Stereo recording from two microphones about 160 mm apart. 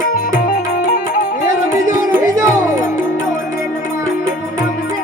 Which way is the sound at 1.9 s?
20° right (ahead or behind).